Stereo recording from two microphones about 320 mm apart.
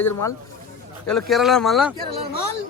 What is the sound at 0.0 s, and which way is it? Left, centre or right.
Speech, centre.